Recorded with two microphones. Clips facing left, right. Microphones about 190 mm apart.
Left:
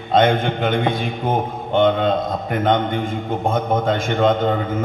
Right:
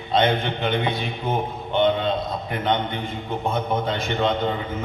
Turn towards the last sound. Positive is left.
turn(degrees=50)  # may be behind; listen again after turning